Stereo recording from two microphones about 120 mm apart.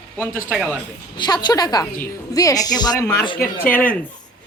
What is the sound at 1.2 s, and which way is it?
A woman's voice, 35° left (ahead or behind).